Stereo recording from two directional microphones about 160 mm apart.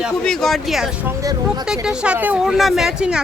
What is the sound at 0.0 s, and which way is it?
Speech, 5° left (ahead or behind).